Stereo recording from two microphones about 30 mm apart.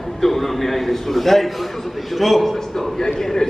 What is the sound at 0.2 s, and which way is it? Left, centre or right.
A man's voice, centre.